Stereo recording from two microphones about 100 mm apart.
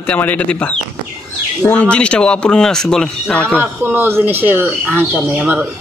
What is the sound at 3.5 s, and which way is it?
Speech, 20° right (ahead or behind).